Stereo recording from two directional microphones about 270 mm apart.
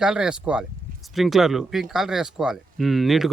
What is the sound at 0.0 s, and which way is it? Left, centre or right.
Speech, centre.